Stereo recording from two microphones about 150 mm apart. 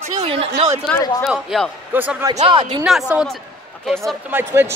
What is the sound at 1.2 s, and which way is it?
Speech, centre (ahead or behind).